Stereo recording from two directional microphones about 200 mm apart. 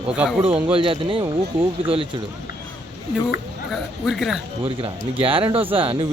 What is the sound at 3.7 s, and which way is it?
Speech, centre (ahead or behind).